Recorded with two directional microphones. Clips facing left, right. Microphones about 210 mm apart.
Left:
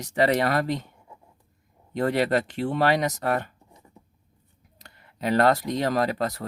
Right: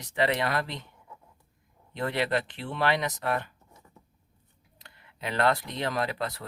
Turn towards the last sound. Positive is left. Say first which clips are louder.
# left 6 dB
turn(degrees=45)  # may be behind; listen again after turning